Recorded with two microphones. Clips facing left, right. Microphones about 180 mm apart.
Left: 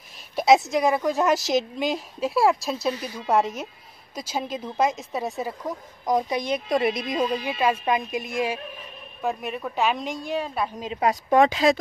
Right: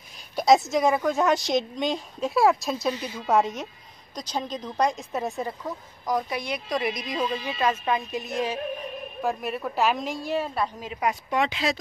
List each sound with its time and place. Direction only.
0.4 s a woman's voice: centre (ahead or behind)
6.0 s speech: 20° left (ahead or behind)
7.4 s speech: 10° left (ahead or behind)
9.2 s a woman's voice: centre (ahead or behind)
10.8 s speech: 25° left (ahead or behind)
11.1 s speech: 45° left (ahead or behind)